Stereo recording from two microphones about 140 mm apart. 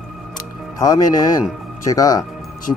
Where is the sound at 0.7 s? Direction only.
25° left (ahead or behind).